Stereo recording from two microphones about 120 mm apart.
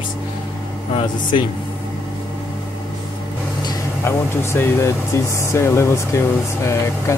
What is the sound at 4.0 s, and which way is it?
Speech, 20° left (ahead or behind).